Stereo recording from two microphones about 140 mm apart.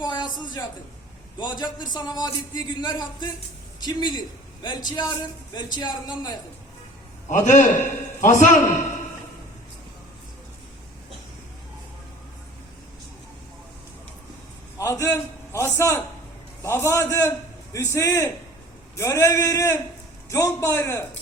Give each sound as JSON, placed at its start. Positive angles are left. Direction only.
{"t": 0.0, "sound": "a woman's voice", "side_deg": 30}
{"t": 7.3, "sound": "a man's voice", "side_deg": 65}
{"t": 14.8, "sound": "a man's voice", "side_deg": 20}